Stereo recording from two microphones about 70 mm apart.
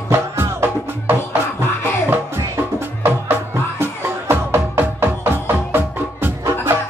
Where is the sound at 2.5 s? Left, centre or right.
Right.